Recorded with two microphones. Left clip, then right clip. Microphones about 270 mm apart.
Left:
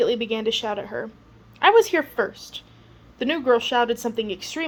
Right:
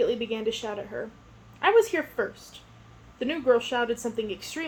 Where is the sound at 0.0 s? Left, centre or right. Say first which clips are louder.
Left 4 dB; left.